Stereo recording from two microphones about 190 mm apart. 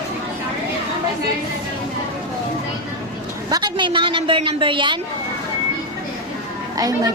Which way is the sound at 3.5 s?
25° right (ahead or behind).